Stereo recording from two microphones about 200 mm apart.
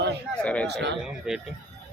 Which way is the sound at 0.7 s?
60° right (ahead or behind).